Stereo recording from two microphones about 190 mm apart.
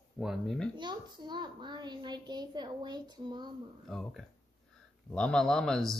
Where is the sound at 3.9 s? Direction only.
Centre (ahead or behind).